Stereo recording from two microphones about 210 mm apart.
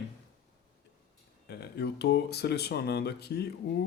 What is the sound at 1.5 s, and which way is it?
Speech, 50° left (ahead or behind).